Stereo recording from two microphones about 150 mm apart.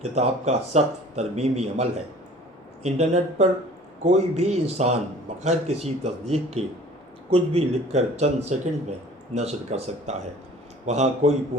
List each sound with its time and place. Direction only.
0.0 s speech: 45° right (ahead or behind)